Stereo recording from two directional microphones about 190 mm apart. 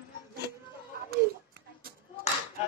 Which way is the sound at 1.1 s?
50° right (ahead or behind).